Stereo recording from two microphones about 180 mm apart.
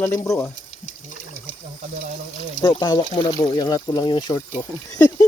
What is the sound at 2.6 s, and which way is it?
Speech, 25° left (ahead or behind).